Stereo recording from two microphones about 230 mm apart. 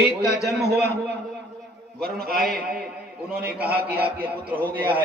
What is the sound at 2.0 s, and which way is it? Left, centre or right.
Speech, right.